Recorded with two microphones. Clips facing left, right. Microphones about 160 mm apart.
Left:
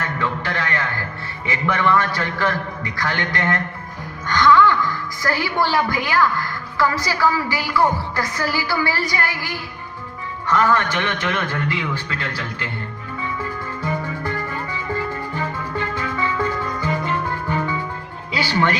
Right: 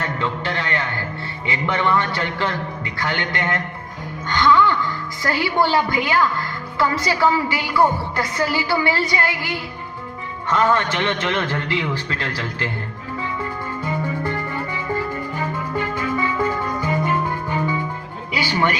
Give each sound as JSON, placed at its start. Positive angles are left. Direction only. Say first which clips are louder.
{"t": 0.2, "sound": "music", "louder": "even", "side_deg": -25}
{"t": 1.5, "sound": "a woman's voice", "louder": "left 1 dB", "side_deg": -20}
{"t": 13.8, "sound": "music", "louder": "right 1 dB", "side_deg": -20}